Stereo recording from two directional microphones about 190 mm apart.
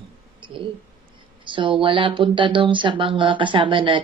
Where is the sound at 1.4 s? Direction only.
25° right (ahead or behind).